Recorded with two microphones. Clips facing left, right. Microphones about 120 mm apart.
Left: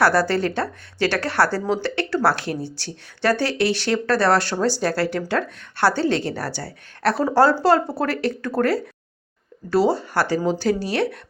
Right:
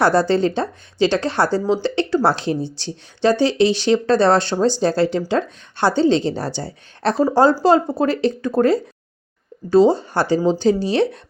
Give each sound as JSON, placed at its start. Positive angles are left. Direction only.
{"t": 0.0, "sound": "speech", "side_deg": -20}